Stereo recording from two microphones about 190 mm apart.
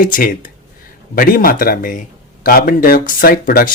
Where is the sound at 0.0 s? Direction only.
45° left (ahead or behind).